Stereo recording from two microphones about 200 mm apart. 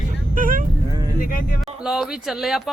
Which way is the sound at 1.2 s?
45° left (ahead or behind).